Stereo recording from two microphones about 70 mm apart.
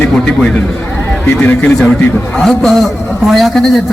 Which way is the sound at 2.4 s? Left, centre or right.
Centre.